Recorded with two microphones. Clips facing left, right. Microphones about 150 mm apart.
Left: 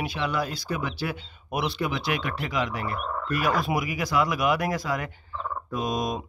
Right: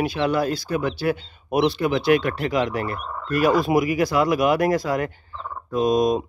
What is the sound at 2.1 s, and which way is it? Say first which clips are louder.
Speech: right 9 dB; 50° right (ahead or behind).